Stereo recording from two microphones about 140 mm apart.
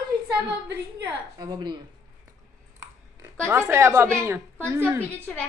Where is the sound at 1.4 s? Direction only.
30° right (ahead or behind).